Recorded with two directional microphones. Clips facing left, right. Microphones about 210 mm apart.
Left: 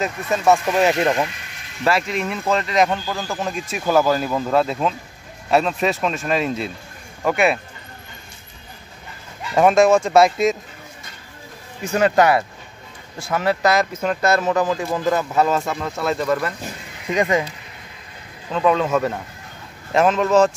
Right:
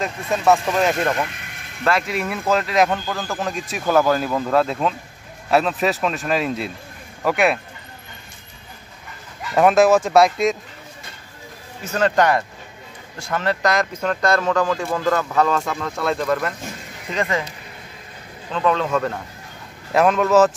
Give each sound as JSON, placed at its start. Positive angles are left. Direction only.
{"t": 0.0, "sound": "speech", "side_deg": 5}
{"t": 9.5, "sound": "speech", "side_deg": 0}
{"t": 11.8, "sound": "speech", "side_deg": 10}
{"t": 17.1, "sound": "speech", "side_deg": 15}
{"t": 18.5, "sound": "speech", "side_deg": 5}